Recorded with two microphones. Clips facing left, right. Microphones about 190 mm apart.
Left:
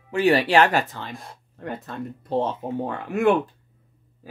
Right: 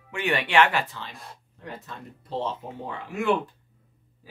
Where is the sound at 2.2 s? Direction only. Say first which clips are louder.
Left 6 dB; 55° left (ahead or behind).